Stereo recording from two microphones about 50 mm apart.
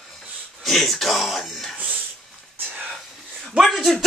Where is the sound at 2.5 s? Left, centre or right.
Right.